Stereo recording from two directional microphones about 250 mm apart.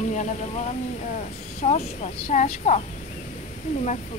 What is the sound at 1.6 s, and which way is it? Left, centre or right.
Speech, left.